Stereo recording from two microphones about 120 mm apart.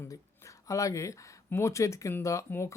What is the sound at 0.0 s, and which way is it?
Speech, 25° left (ahead or behind).